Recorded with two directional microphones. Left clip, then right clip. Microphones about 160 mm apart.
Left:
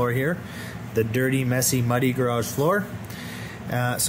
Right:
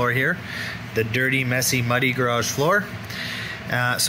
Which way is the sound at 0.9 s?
35° left (ahead or behind).